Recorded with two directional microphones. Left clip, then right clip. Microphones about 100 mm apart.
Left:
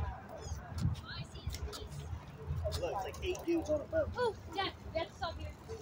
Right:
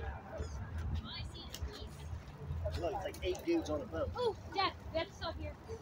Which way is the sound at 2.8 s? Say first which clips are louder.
Right 1 dB; 40° right (ahead or behind).